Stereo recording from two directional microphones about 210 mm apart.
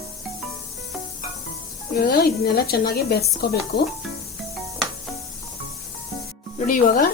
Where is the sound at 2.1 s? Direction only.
45° left (ahead or behind).